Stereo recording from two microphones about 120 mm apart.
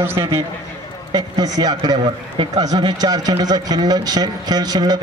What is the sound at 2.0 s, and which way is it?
A man's voice, 45° right (ahead or behind).